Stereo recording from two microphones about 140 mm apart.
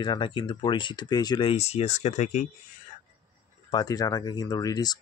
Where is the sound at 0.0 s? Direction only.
35° left (ahead or behind).